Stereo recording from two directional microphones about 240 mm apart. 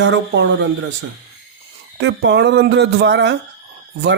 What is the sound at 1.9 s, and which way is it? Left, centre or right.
Speech, right.